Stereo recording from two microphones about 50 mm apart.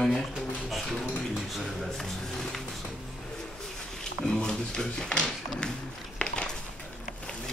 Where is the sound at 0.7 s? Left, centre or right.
Centre.